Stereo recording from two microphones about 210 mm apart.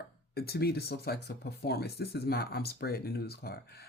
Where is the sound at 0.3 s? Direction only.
50° left (ahead or behind).